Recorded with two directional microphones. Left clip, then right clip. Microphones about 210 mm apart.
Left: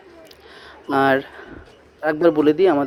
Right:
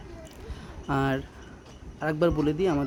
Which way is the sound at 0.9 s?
20° left (ahead or behind).